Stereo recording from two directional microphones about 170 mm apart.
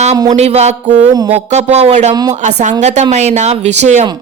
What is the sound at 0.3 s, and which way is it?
Speech, 40° right (ahead or behind).